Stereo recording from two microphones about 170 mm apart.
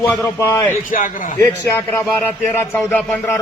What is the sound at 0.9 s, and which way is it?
Speech, 50° left (ahead or behind).